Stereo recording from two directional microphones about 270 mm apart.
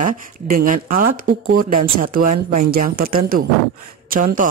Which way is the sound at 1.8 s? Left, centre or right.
Right.